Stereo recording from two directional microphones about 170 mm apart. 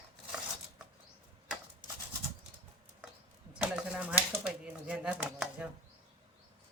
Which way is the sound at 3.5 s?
5° right (ahead or behind).